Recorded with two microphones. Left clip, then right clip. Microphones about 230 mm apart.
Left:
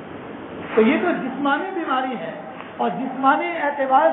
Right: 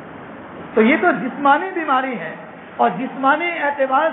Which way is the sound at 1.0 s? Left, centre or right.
Right.